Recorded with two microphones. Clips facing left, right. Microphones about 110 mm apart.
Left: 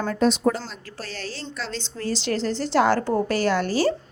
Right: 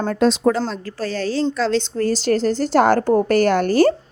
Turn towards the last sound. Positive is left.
turn(degrees=-55)  # may be behind; listen again after turning